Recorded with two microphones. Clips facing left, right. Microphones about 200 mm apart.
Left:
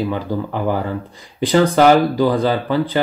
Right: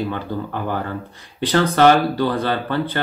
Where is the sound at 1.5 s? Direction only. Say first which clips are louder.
Left 2 dB; 10° left (ahead or behind).